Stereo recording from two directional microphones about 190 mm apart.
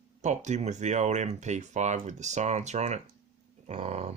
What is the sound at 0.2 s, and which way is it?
Speech, 40° right (ahead or behind).